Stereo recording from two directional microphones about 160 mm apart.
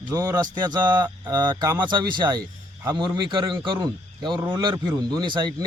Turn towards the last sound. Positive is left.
turn(degrees=-25)  # may be behind; listen again after turning